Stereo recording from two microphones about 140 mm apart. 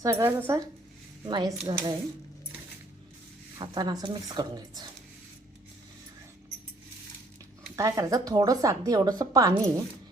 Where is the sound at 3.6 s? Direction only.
30° right (ahead or behind).